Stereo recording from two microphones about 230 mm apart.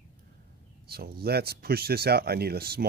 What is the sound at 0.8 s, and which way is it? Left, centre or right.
Speech, right.